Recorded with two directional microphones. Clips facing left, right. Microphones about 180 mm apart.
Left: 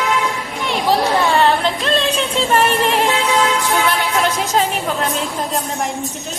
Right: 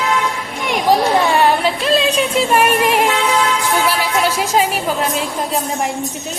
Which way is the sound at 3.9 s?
5° right (ahead or behind).